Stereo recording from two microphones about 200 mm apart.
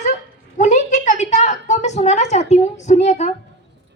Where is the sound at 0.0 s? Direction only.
40° left (ahead or behind).